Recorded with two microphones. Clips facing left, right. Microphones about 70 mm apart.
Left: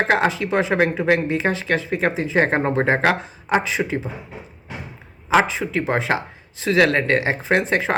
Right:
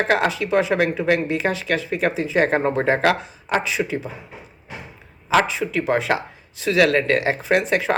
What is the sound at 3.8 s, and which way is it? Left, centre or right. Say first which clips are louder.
Speech: even; centre.